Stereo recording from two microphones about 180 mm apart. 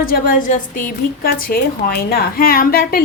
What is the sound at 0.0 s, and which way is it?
A woman's voice, 50° left (ahead or behind).